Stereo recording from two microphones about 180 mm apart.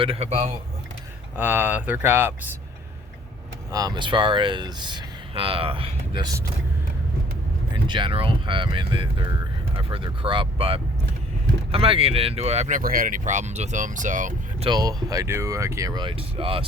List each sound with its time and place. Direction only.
0.0 s speech: 35° right (ahead or behind)
1.4 s speech: 10° right (ahead or behind)
3.7 s speech: 20° right (ahead or behind)
7.7 s speech: 25° right (ahead or behind); by 14.7 s 45° right (ahead or behind)
14.7 s speech: 20° right (ahead or behind)